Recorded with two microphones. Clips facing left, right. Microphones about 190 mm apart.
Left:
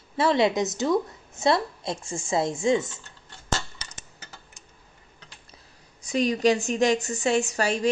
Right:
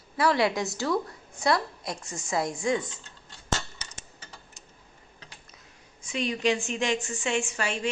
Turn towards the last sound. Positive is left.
turn(degrees=40)  # may be behind; listen again after turning